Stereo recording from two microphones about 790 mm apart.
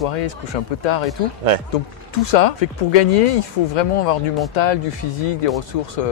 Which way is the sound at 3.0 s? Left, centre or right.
Left.